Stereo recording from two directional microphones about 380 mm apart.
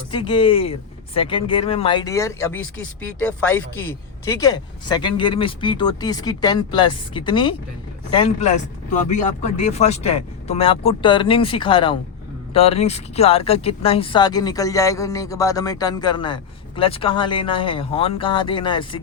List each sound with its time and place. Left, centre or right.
0.1 s speech: centre